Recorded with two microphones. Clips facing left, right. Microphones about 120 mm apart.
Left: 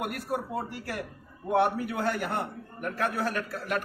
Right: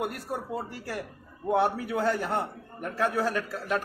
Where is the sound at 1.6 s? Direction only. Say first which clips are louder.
Right 1 dB; 30° right (ahead or behind).